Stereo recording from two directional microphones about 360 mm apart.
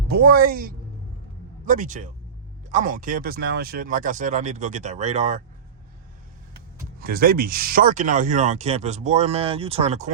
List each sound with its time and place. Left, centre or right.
0.1 s speech: right
7.0 s speech: right